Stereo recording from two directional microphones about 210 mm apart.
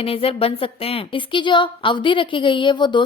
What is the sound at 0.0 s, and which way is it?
A woman's voice, 25° left (ahead or behind).